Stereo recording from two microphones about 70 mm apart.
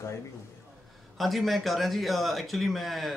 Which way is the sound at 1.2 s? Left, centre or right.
Centre.